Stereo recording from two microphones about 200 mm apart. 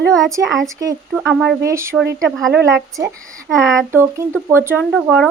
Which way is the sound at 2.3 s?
Centre (ahead or behind).